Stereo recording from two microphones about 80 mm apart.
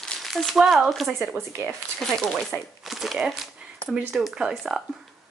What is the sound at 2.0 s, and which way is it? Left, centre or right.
Speech, centre.